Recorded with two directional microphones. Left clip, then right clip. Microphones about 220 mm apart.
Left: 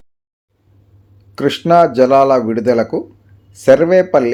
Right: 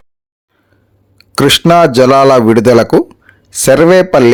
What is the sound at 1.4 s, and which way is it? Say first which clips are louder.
Speech: right 4 dB; 40° right (ahead or behind).